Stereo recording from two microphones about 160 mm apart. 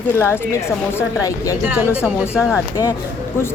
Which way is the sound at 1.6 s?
10° right (ahead or behind).